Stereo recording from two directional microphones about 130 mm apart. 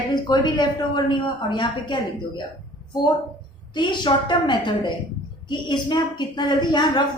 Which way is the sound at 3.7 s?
35° left (ahead or behind).